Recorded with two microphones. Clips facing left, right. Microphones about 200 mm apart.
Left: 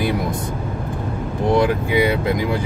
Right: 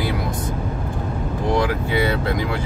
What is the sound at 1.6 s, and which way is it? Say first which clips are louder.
Speech: left 4 dB; 15° left (ahead or behind).